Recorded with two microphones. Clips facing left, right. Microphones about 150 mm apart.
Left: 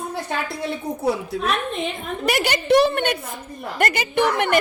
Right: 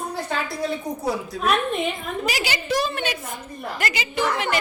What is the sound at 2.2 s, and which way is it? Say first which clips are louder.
A woman's voice: left 8 dB; 55° left (ahead or behind).